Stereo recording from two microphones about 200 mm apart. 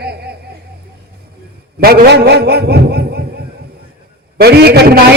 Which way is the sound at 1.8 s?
50° right (ahead or behind).